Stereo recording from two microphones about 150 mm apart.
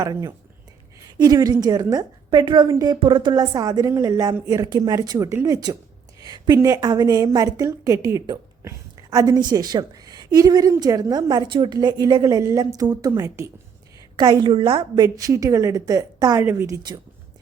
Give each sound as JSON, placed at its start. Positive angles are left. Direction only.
{"t": 0.0, "sound": "a woman's voice", "side_deg": -25}
{"t": 14.2, "sound": "a woman's voice", "side_deg": -30}